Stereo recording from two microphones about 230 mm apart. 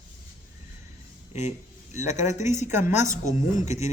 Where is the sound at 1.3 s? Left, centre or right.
Left.